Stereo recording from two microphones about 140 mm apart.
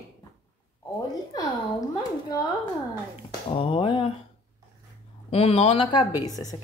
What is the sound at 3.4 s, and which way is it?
Speech, 40° left (ahead or behind).